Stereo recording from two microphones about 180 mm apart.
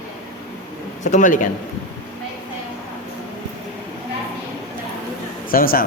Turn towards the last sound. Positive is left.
turn(degrees=55)  # may be behind; listen again after turning